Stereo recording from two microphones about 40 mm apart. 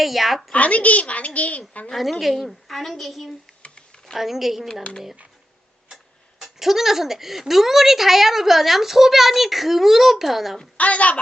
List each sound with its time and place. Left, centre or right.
0.0 s a woman's voice: centre
0.5 s a woman's voice: left
2.0 s a woman's voice: centre
3.9 s a sound: centre
4.2 s speech: centre
6.4 s speech: centre
10.8 s a woman's voice: left